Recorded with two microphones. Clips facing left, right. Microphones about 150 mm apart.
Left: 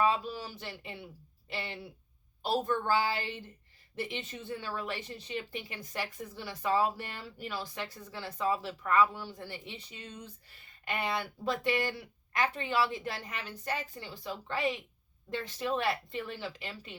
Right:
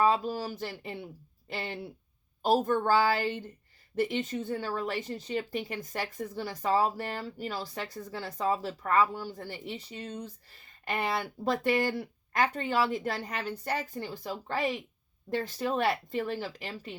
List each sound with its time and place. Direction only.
0.0 s speech: 40° right (ahead or behind)